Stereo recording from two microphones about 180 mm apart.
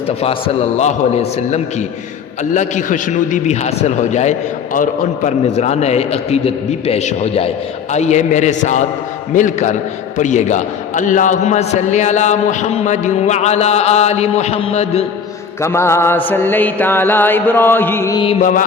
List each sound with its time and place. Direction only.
0.2 s a man's voice: 35° left (ahead or behind)
15.6 s mantra: 15° left (ahead or behind)